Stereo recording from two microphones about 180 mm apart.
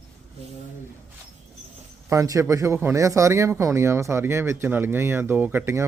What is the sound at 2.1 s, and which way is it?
Speech, 15° right (ahead or behind).